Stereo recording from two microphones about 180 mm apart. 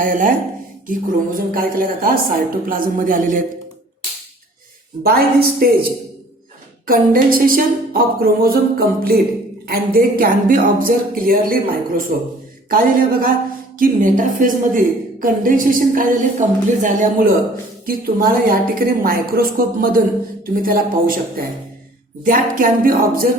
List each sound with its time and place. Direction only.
0.0 s a woman's voice: 50° right (ahead or behind)
5.0 s a woman's voice: 55° right (ahead or behind)